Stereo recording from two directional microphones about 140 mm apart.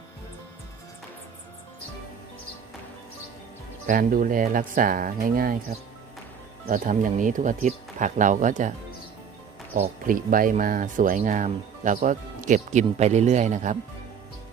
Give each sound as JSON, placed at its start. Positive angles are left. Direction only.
{"t": 3.8, "sound": "speech", "side_deg": -80}
{"t": 6.7, "sound": "speech", "side_deg": -70}
{"t": 9.7, "sound": "speech", "side_deg": -75}
{"t": 11.2, "sound": "speech", "side_deg": -55}